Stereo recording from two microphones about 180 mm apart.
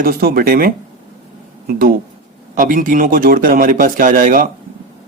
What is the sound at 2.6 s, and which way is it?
Speech, 50° right (ahead or behind).